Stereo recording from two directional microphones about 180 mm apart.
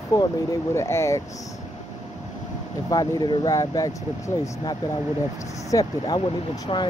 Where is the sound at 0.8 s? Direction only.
15° left (ahead or behind).